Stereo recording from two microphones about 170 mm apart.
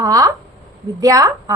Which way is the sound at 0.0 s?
20° right (ahead or behind).